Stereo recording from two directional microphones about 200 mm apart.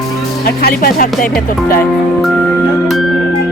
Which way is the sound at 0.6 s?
45° left (ahead or behind).